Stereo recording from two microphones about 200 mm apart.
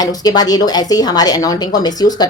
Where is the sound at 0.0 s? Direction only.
20° left (ahead or behind).